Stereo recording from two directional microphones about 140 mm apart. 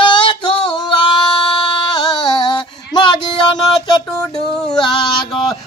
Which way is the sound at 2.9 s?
35° left (ahead or behind).